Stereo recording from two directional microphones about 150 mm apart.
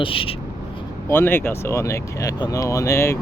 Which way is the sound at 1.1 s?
15° left (ahead or behind).